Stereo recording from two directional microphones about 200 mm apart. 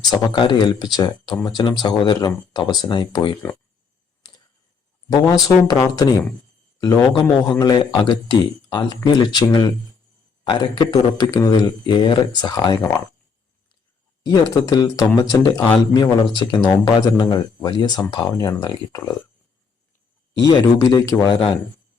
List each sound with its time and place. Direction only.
0.1 s speech: 20° left (ahead or behind)
5.0 s speech: 20° left (ahead or behind)
14.3 s speech: 20° left (ahead or behind)
20.7 s speech: 15° left (ahead or behind)